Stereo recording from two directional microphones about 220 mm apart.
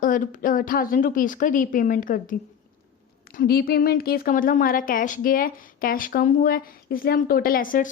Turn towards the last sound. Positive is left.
turn(degrees=40)  # may be behind; listen again after turning